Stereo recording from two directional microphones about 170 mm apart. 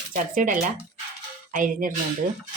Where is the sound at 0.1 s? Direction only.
50° right (ahead or behind).